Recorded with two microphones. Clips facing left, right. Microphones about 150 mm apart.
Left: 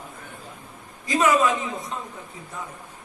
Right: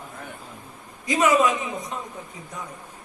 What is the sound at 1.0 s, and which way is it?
Music, 20° right (ahead or behind).